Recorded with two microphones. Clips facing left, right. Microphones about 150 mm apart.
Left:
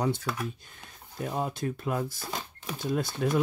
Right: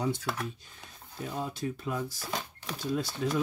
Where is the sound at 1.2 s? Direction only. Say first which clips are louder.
Left 3 dB; 55° left (ahead or behind).